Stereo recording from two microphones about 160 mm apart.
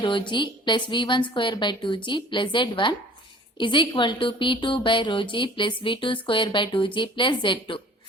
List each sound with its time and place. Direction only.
0.0 s a woman's voice: 30° left (ahead or behind)